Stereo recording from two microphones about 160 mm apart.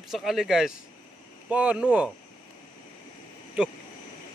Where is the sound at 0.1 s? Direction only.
Centre (ahead or behind).